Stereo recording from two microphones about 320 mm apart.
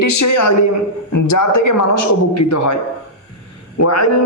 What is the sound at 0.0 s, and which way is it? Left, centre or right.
A man's voice, left.